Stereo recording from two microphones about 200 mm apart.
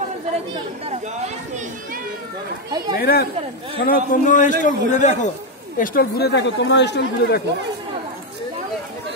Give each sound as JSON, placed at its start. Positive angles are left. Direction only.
{"t": 3.0, "sound": "a man's voice", "side_deg": 50}
{"t": 5.8, "sound": "speech", "side_deg": 50}